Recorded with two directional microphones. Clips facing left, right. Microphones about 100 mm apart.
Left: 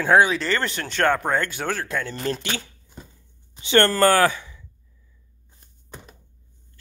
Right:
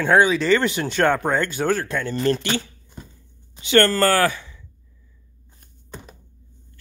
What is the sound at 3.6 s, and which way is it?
Speech, 20° left (ahead or behind).